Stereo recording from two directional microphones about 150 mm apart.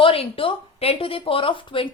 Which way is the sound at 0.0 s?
35° left (ahead or behind).